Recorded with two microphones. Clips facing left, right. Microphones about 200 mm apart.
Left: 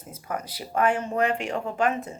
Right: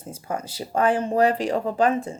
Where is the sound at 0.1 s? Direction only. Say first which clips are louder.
Right 3 dB; 30° right (ahead or behind).